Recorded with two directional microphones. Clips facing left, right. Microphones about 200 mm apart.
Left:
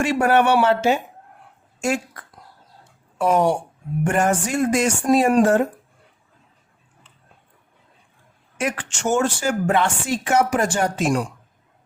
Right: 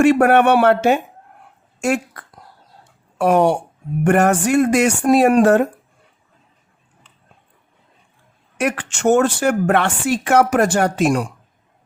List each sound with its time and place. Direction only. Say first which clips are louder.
0.0 s a woman's voice: right 5 dB; 60° right (ahead or behind)
3.2 s a woman's voice: right 3 dB; 65° right (ahead or behind)
8.5 s a woman's voice: right 4 dB; 65° right (ahead or behind)